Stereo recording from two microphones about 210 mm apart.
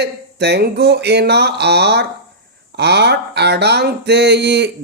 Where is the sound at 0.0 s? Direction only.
55° right (ahead or behind).